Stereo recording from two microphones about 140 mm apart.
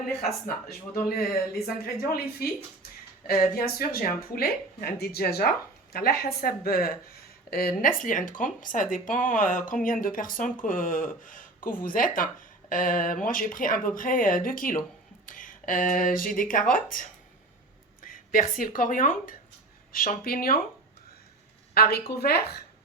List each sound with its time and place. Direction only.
0.7 s speech: 90° left
19.9 s speech: 90° left
21.8 s speech: 90° left